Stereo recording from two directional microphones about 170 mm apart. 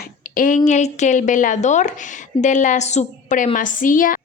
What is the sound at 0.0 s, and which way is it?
A woman's voice, 55° left (ahead or behind).